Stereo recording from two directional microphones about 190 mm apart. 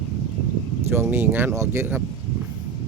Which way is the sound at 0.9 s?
10° right (ahead or behind).